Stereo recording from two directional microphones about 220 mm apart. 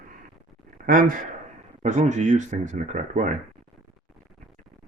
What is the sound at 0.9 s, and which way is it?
Speech, 40° right (ahead or behind).